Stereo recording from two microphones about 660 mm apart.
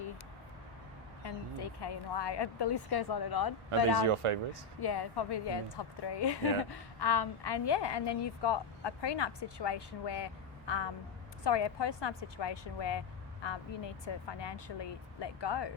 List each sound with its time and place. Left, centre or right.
1.2 s a woman's voice: left
4.0 s speech: right
4.8 s a woman's voice: left